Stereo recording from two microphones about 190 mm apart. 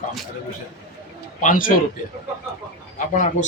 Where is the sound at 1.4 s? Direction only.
45° left (ahead or behind).